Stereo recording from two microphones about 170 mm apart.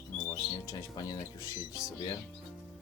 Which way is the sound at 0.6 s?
20° left (ahead or behind).